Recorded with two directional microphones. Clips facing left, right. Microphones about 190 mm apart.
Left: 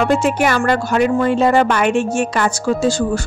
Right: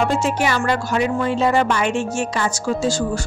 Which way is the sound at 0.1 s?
55° left (ahead or behind).